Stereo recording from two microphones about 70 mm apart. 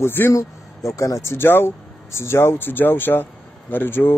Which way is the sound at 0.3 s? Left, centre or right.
Left.